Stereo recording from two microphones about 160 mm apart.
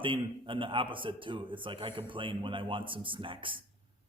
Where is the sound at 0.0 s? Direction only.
30° right (ahead or behind).